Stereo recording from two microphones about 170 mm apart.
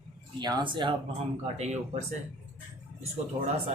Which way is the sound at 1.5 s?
40° right (ahead or behind).